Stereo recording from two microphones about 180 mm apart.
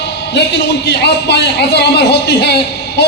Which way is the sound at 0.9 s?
70° left (ahead or behind).